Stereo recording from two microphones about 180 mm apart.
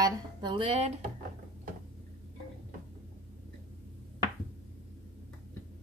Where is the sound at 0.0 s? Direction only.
25° right (ahead or behind).